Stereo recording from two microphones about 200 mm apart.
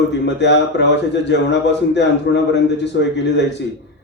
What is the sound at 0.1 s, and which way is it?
A man's voice, 60° left (ahead or behind).